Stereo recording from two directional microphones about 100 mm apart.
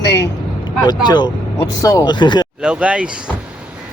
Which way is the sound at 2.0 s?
50° left (ahead or behind).